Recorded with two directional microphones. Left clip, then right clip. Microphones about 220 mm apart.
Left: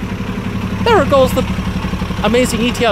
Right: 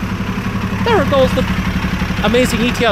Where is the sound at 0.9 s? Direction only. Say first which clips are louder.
Left 2 dB; 15° left (ahead or behind).